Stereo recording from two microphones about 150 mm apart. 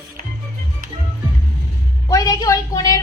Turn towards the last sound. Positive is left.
turn(degrees=25)  # may be behind; listen again after turning